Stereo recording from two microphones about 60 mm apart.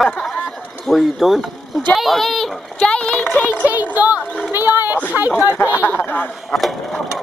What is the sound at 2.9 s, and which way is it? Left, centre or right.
Speech, centre.